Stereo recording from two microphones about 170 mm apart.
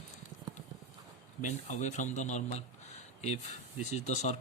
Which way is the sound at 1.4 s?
45° left (ahead or behind).